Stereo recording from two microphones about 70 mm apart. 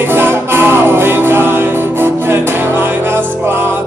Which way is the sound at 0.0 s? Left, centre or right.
Right.